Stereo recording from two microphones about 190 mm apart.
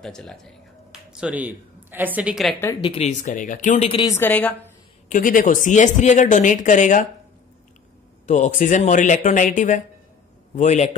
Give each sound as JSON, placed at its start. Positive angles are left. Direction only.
{"t": 0.0, "sound": "speech", "side_deg": 5}
{"t": 2.8, "sound": "speech", "side_deg": 30}
{"t": 3.9, "sound": "a woman's voice", "side_deg": 20}
{"t": 5.1, "sound": "speech", "side_deg": 45}
{"t": 8.3, "sound": "speech", "side_deg": 40}